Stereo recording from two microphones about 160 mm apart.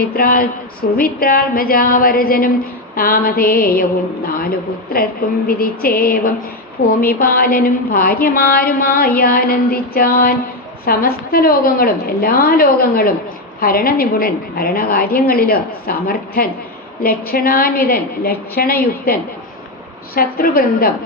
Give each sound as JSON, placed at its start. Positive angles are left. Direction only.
{"t": 0.0, "sound": "a woman's voice", "side_deg": 65}
{"t": 5.5, "sound": "a woman's voice", "side_deg": 65}
{"t": 20.1, "sound": "a woman's voice", "side_deg": 65}